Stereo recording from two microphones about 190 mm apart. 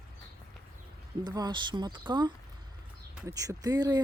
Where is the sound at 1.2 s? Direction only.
20° right (ahead or behind).